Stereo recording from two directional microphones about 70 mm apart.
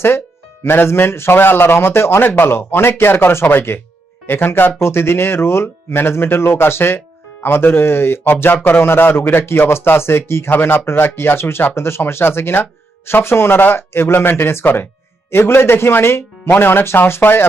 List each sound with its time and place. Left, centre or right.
0.6 s speech: left